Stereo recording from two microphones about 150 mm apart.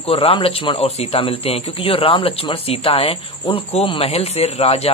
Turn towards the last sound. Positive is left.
turn(degrees=40)  # may be behind; listen again after turning